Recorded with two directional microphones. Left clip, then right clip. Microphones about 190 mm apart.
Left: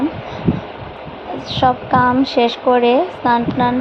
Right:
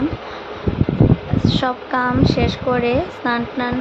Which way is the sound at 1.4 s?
5° left (ahead or behind).